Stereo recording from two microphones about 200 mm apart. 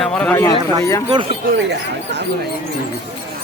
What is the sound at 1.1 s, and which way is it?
Speech, 25° right (ahead or behind).